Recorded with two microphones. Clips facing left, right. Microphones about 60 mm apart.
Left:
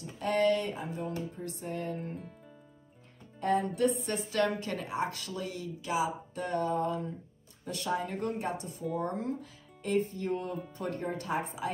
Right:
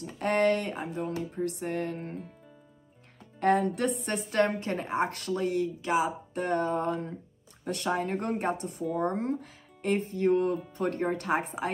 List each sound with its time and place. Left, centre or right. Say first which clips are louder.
0.0 s a woman's voice: right 2 dB; right
3.3 s a woman's voice: right 4 dB; right